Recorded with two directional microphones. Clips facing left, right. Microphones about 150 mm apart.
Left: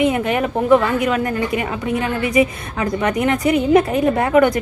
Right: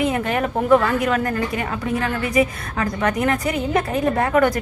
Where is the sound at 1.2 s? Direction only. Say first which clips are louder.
Left 3 dB; 15° left (ahead or behind).